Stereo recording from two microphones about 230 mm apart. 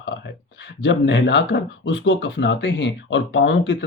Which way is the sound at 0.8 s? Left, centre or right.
Left.